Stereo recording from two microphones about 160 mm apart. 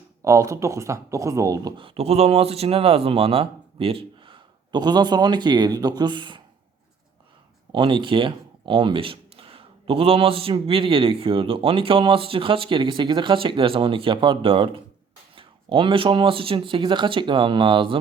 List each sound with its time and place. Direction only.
0.2 s speech: 20° right (ahead or behind)
1.8 s speech: 40° right (ahead or behind)
7.7 s speech: 30° right (ahead or behind)